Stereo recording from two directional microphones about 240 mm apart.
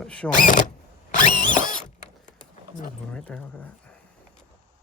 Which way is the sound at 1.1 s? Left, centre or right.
Left.